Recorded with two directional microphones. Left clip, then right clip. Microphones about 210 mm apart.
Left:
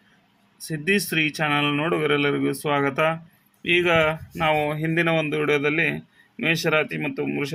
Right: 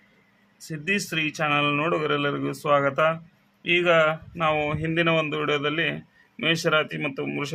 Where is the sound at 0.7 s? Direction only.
10° left (ahead or behind).